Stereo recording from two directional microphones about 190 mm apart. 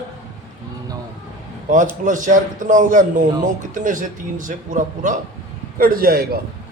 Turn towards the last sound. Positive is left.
turn(degrees=-50)  # may be behind; listen again after turning